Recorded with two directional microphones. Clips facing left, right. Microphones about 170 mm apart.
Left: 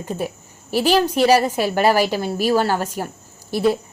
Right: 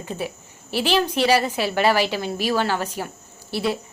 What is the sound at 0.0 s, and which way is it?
A woman's voice, 40° left (ahead or behind).